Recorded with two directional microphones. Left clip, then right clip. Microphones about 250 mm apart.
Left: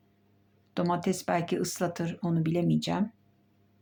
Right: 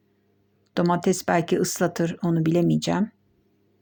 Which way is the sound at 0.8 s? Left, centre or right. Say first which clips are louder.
Right 7 dB; right.